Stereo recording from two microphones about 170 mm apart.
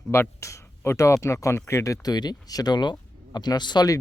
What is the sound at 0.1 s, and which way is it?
Speech, 15° left (ahead or behind).